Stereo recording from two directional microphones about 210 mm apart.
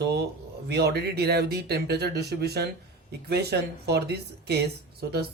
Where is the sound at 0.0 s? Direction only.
50° right (ahead or behind).